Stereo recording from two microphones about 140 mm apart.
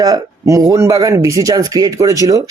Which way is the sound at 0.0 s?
25° right (ahead or behind).